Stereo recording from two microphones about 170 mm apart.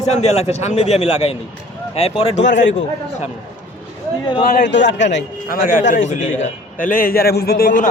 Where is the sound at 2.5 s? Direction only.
90° left.